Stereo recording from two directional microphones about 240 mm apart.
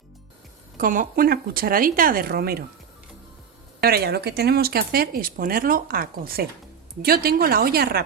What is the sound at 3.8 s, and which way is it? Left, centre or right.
Speech, right.